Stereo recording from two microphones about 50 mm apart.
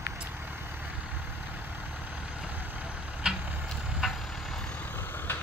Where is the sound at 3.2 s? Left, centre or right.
Centre.